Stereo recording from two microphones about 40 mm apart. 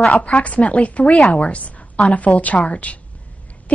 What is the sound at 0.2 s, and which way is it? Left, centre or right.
A woman's voice, left.